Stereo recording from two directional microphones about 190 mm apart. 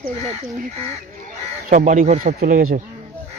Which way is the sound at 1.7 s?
40° right (ahead or behind).